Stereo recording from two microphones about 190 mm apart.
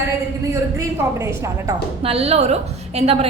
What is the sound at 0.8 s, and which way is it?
Speech, 15° right (ahead or behind).